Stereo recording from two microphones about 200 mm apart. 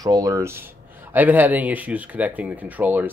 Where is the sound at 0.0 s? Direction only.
15° right (ahead or behind).